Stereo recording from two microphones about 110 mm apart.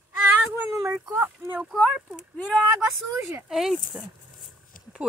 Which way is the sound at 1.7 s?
Centre (ahead or behind).